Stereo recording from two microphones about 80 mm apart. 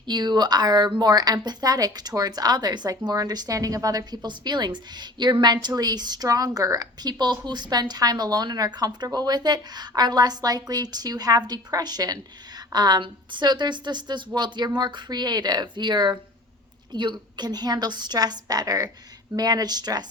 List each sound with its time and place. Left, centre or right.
0.0 s a woman's voice: right